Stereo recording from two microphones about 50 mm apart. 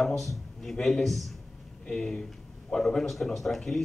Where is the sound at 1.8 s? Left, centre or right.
Centre.